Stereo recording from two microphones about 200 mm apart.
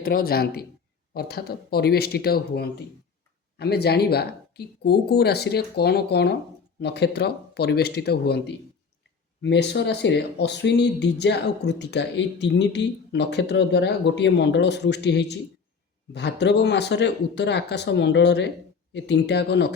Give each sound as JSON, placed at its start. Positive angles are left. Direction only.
{"t": 0.0, "sound": "speech", "side_deg": 50}